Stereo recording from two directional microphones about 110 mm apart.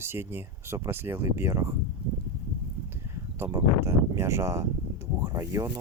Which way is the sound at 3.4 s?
25° right (ahead or behind).